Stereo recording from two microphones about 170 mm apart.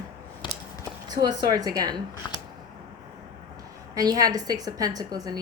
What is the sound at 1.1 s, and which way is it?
Speech, 25° right (ahead or behind).